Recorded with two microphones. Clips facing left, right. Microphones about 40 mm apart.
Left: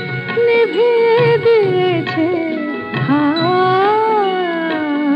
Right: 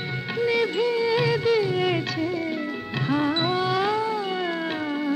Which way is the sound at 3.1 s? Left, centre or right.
Left.